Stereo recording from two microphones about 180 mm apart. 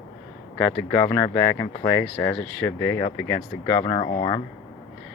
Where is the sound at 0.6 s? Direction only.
10° left (ahead or behind).